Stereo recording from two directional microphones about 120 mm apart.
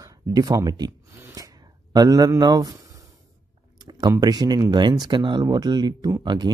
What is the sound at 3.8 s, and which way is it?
Speech, 35° right (ahead or behind).